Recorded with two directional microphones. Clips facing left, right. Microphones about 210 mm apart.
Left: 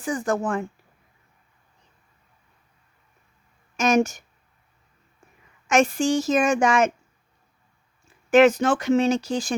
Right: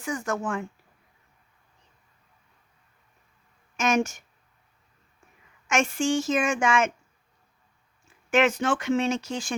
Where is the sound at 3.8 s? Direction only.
35° left (ahead or behind).